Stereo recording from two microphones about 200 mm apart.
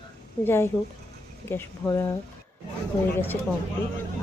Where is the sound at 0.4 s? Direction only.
10° left (ahead or behind).